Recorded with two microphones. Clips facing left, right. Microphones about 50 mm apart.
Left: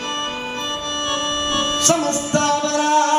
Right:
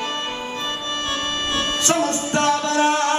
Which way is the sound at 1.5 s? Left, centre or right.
Right.